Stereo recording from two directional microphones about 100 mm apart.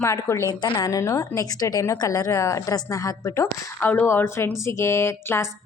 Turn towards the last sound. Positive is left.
turn(degrees=25)  # may be behind; listen again after turning